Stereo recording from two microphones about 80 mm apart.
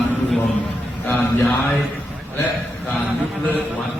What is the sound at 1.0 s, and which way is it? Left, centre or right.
Speech, left.